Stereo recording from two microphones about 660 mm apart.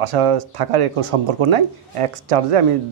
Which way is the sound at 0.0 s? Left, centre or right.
Right.